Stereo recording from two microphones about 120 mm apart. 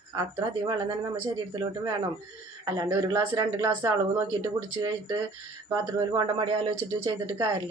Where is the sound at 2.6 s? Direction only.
30° right (ahead or behind).